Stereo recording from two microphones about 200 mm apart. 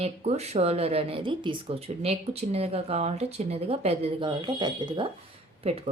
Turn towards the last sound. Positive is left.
turn(degrees=-30)  # may be behind; listen again after turning